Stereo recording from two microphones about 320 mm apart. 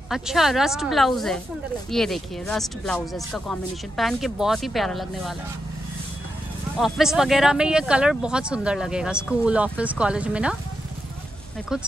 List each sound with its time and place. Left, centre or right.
0.1 s speech: centre
6.8 s speech: centre